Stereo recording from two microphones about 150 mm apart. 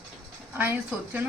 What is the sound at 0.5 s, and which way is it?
Speech, 10° right (ahead or behind).